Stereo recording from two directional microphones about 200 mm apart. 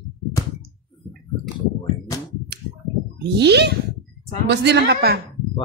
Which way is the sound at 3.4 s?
55° right (ahead or behind).